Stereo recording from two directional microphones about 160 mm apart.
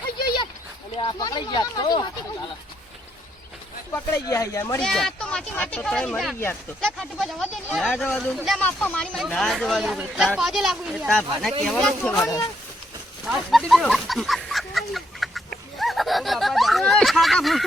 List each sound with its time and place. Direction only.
0.9 s speech: 30° left (ahead or behind)
3.9 s speech: 20° left (ahead or behind)
4.8 s speech: 5° left (ahead or behind)
13.2 s chicken: centre (ahead or behind)